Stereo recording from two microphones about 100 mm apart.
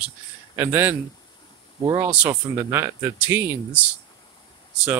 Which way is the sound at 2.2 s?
25° right (ahead or behind).